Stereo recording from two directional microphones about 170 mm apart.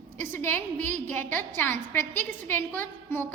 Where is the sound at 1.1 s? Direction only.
10° left (ahead or behind).